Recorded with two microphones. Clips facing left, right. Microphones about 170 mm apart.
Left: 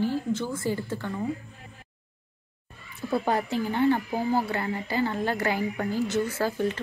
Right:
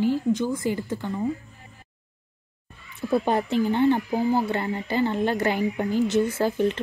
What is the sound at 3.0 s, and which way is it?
Speech, 20° right (ahead or behind).